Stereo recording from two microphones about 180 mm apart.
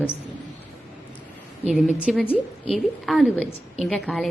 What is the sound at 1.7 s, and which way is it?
Speech, 5° right (ahead or behind).